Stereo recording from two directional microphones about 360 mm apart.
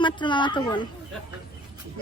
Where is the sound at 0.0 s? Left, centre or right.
Centre.